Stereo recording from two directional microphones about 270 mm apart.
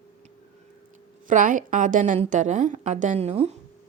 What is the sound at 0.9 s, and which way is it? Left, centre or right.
Speech, right.